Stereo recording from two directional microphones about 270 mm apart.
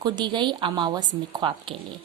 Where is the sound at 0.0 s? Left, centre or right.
Centre.